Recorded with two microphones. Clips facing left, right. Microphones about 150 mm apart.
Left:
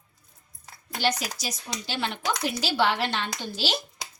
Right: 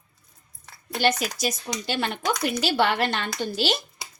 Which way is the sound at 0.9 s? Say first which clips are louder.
Right 4 dB; 55° right (ahead or behind).